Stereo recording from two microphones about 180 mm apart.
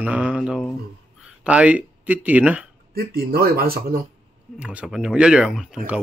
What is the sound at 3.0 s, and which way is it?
Speech, 60° right (ahead or behind).